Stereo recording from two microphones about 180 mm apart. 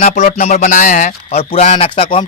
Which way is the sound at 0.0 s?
40° left (ahead or behind).